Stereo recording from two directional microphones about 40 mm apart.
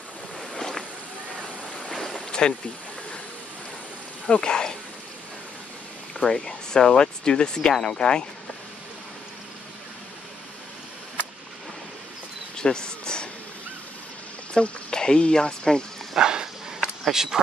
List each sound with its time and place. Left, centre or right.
0.4 s a sound: centre
1.9 s vehicle: centre
2.1 s boat: centre
4.3 s speech: left
6.2 s speech: centre
12.5 s insect: centre
14.5 s speech: centre
16.2 s dog: centre
17.1 s speech: centre